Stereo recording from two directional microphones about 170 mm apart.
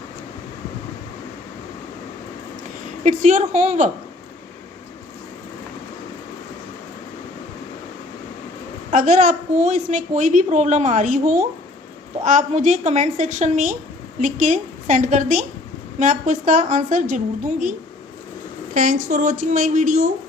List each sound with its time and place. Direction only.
3.0 s a woman's voice: 50° right (ahead or behind)
8.9 s a woman's voice: 50° right (ahead or behind)